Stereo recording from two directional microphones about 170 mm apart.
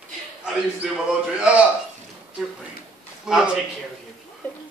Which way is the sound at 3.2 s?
5° right (ahead or behind).